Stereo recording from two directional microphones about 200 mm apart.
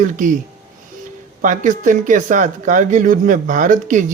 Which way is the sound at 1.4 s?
40° right (ahead or behind).